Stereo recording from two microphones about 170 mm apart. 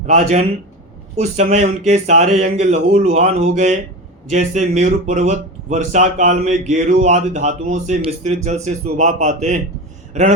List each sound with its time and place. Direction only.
0.1 s speech: 45° right (ahead or behind)